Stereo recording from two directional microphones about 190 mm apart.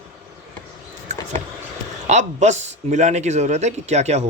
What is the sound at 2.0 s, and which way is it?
A man's voice, 40° right (ahead or behind).